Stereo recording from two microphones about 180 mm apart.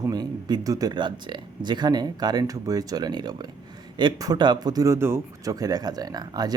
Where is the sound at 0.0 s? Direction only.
20° right (ahead or behind).